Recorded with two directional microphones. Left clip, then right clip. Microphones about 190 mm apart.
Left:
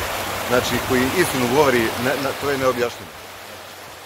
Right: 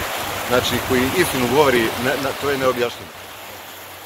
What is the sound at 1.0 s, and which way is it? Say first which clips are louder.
Speech: even; 35° left (ahead or behind).